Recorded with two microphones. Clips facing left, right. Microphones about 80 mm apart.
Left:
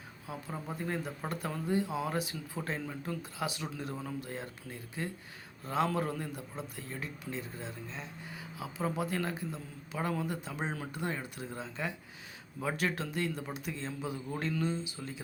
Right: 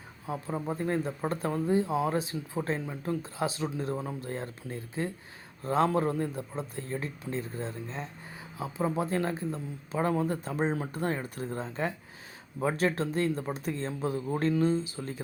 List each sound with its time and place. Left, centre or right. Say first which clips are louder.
0.3 s speech: right 7 dB; right